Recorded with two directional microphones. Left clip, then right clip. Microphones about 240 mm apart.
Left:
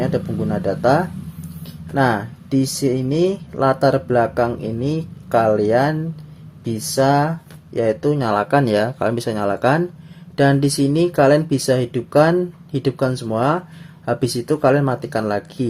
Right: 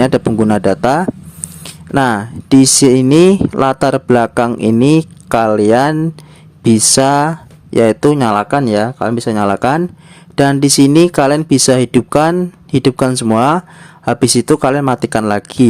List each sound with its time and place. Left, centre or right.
0.0 s speech: right